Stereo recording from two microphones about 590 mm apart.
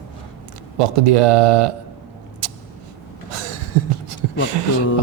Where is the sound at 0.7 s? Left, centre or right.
Right.